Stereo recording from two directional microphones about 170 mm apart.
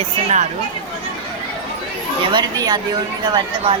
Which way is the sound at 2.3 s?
25° right (ahead or behind).